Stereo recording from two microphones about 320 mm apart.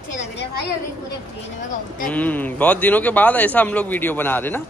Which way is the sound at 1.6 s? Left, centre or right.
Left.